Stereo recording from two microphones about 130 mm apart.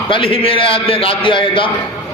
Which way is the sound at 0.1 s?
45° left (ahead or behind).